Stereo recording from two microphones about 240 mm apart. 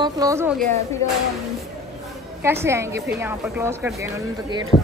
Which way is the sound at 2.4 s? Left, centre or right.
Centre.